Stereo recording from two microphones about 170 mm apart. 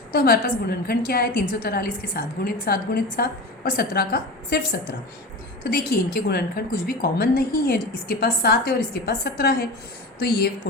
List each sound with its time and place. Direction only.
0.1 s a woman's voice: 60° left (ahead or behind)
5.7 s a woman's voice: 60° left (ahead or behind)